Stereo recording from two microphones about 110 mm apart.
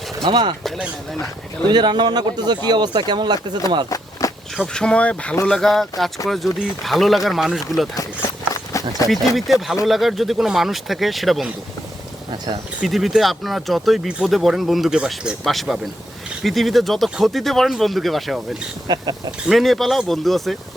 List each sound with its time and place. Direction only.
0.2 s speech: 45° right (ahead or behind)
1.7 s speech: 45° right (ahead or behind)
3.8 s walk: 30° left (ahead or behind)
4.5 s speech: 5° left (ahead or behind)
7.9 s a sound: 30° left (ahead or behind)
9.0 s speech: centre (ahead or behind)
12.8 s speech: centre (ahead or behind)
18.9 s speech: 40° right (ahead or behind)
19.5 s speech: centre (ahead or behind)